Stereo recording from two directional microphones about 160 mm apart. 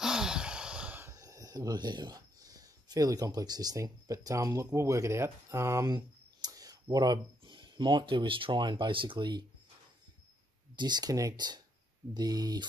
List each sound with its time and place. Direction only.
0.0 s speech: 5° right (ahead or behind); by 9.5 s 30° right (ahead or behind)
10.8 s speech: 25° right (ahead or behind)